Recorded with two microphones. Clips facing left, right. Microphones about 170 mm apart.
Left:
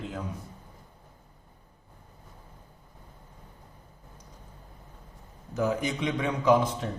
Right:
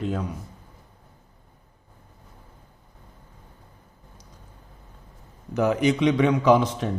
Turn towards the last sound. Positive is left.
turn(degrees=-85)